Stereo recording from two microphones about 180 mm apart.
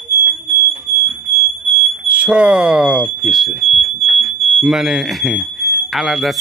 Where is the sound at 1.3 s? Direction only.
15° left (ahead or behind).